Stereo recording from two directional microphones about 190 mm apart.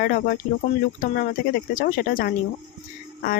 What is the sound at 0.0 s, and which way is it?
Speech, 50° left (ahead or behind).